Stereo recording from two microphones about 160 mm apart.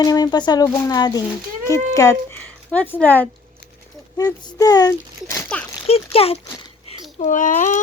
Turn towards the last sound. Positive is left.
turn(degrees=50)  # may be behind; listen again after turning